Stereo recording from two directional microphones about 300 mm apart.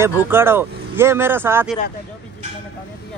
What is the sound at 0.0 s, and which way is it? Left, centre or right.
Speech, centre.